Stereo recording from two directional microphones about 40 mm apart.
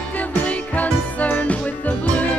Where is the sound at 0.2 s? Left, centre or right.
Left.